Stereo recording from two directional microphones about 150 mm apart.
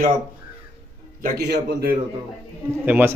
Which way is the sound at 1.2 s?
90° right.